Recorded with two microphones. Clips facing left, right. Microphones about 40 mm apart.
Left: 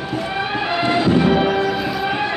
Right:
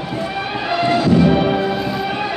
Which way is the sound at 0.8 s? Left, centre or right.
Left.